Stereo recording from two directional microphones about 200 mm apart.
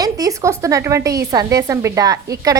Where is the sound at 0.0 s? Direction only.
15° right (ahead or behind).